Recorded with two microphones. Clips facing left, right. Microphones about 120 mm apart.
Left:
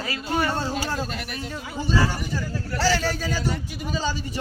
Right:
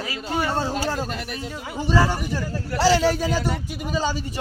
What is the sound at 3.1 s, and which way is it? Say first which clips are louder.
Speech: right 5 dB; 20° right (ahead or behind).